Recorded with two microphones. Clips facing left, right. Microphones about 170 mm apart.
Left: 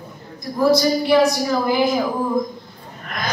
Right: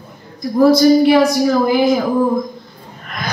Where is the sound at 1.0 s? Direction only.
55° right (ahead or behind).